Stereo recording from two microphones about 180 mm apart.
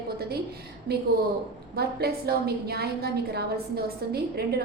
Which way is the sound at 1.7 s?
60° right (ahead or behind).